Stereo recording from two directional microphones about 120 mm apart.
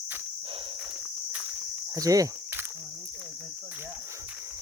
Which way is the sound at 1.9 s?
30° right (ahead or behind).